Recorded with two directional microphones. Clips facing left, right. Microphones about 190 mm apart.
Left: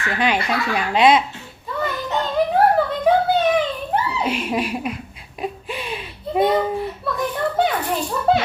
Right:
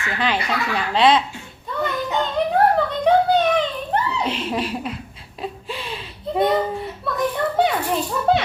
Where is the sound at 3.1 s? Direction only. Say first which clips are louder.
Right 1 dB; 5° left (ahead or behind).